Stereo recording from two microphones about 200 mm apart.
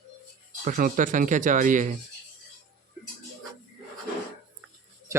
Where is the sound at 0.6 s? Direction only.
40° right (ahead or behind).